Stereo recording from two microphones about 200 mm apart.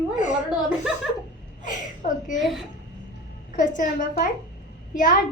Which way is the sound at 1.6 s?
40° left (ahead or behind).